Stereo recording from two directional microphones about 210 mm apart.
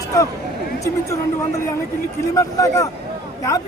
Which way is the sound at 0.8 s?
15° left (ahead or behind).